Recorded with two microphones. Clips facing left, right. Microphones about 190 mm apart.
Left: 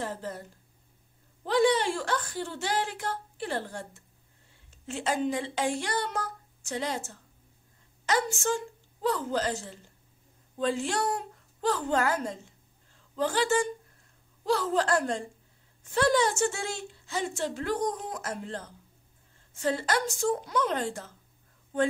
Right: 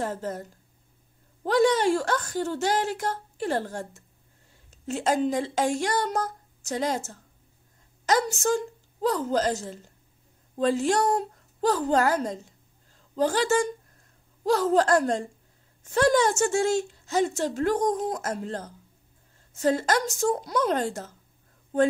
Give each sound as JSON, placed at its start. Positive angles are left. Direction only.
{"t": 0.0, "sound": "a woman's voice", "side_deg": -45}